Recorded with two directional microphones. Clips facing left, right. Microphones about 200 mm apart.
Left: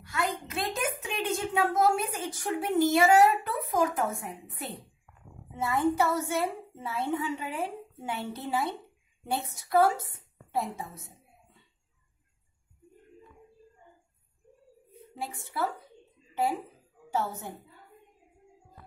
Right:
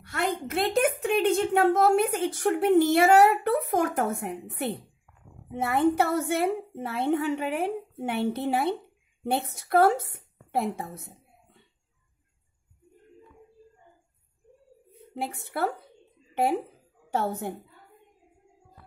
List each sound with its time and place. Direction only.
0.0 s a sound: 60° right (ahead or behind)
0.5 s a woman's voice: 65° right (ahead or behind)
15.1 s a woman's voice: 60° right (ahead or behind)
17.1 s a woman's voice: 60° right (ahead or behind)